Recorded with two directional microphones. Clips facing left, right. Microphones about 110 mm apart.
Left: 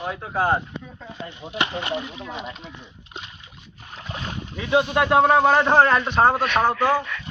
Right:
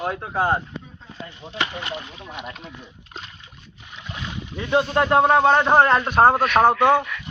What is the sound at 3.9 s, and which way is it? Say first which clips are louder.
Boat: left 1 dB; 40° left (ahead or behind).